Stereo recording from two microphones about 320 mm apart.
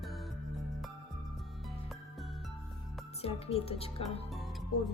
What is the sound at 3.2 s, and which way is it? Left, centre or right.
A woman's voice, centre.